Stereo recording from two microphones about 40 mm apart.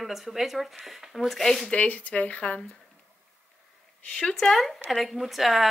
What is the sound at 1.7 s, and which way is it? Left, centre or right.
Speech, left.